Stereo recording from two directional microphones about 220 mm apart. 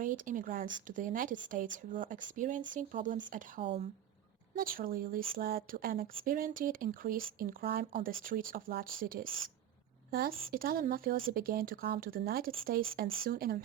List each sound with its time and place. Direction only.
0.0 s speech: 35° right (ahead or behind)